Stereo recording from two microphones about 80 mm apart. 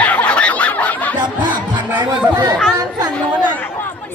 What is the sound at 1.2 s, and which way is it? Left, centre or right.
Music, right.